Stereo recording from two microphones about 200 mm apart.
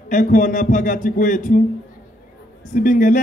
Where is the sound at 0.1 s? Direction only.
40° left (ahead or behind).